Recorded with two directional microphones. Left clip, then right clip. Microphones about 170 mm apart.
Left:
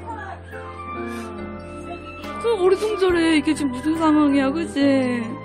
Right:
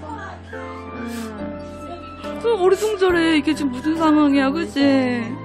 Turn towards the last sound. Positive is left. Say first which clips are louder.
# right 1 dB
turn(degrees=0)  # may be behind; listen again after turning